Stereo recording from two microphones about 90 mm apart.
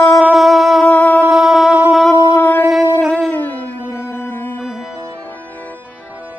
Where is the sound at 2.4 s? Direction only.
20° left (ahead or behind).